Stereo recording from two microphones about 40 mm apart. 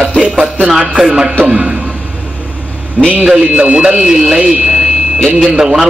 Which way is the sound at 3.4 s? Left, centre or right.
Right.